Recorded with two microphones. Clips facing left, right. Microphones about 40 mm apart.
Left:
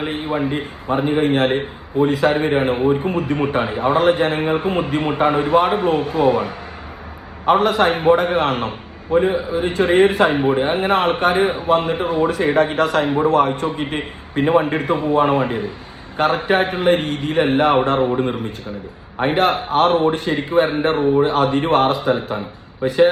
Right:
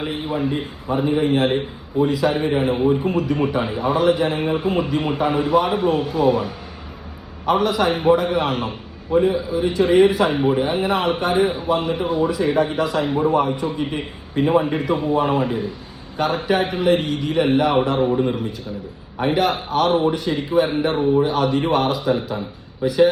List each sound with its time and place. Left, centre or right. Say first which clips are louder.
0.0 s a man's voice: left 2 dB; left
7.5 s a man's voice: left 3 dB; left
19.3 s a man's voice: left 2 dB; left